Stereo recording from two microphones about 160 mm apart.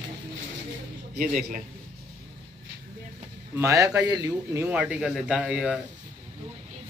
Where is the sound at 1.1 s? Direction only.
55° right (ahead or behind).